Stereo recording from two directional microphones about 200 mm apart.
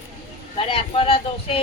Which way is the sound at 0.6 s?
25° left (ahead or behind).